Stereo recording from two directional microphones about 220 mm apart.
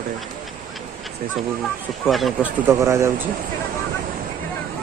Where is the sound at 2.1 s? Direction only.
Centre (ahead or behind).